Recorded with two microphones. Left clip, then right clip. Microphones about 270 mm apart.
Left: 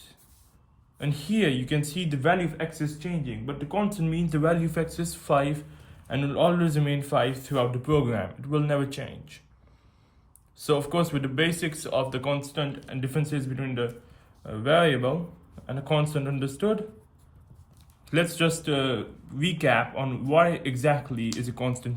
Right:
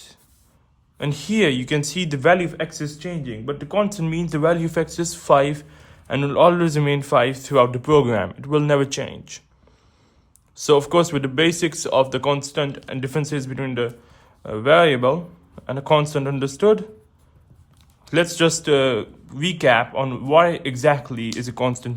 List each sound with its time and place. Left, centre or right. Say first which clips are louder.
0.9 s speech: right 7 dB; right
10.6 s speech: right 9 dB; right
18.1 s a man's voice: right 7 dB; centre